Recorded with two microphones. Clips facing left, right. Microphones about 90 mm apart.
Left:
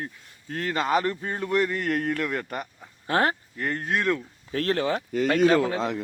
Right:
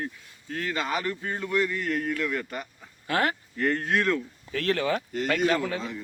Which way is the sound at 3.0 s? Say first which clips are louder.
Left 3 dB; 35° left (ahead or behind).